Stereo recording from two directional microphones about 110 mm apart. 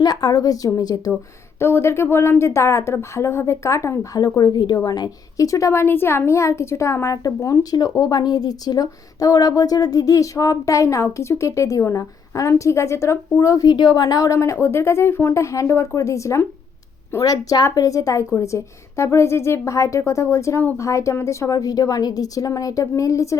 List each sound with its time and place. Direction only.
0.0 s speech: 35° left (ahead or behind)
1.5 s a woman's voice: 20° left (ahead or behind)